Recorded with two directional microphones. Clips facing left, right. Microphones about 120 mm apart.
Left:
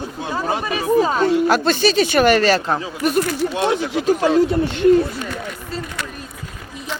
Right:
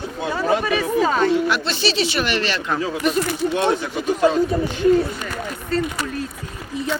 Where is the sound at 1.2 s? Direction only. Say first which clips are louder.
Left 3 dB; 40° left (ahead or behind).